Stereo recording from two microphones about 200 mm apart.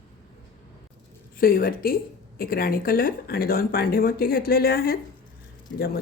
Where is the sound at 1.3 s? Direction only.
45° left (ahead or behind).